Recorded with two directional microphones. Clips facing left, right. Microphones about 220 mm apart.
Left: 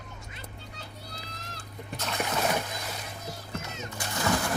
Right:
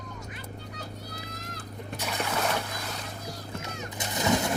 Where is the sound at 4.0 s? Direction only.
20° right (ahead or behind).